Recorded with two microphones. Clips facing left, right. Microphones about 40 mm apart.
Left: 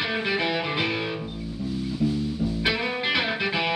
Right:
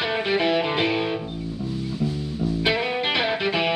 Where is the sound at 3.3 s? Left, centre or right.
Centre.